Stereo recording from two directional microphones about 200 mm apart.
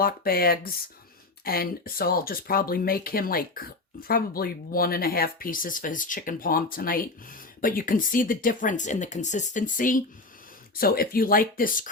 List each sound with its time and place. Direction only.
0.0 s speech: 45° left (ahead or behind)